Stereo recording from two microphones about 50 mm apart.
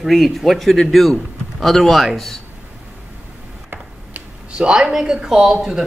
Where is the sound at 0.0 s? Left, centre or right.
Centre.